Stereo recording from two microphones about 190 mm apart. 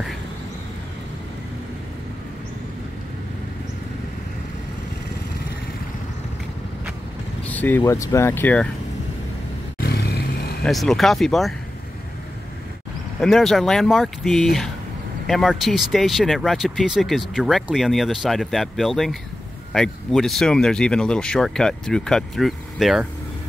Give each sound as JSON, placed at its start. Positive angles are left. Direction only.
{"t": 7.4, "sound": "speech", "side_deg": 10}
{"t": 9.8, "sound": "vehicle", "side_deg": 55}
{"t": 10.6, "sound": "speech", "side_deg": 0}
{"t": 13.2, "sound": "speech", "side_deg": 0}